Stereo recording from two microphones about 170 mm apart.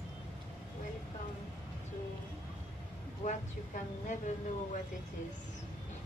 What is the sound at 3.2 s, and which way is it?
Speech, 45° left (ahead or behind).